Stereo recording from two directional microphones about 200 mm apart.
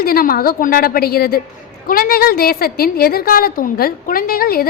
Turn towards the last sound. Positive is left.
turn(degrees=50)  # may be behind; listen again after turning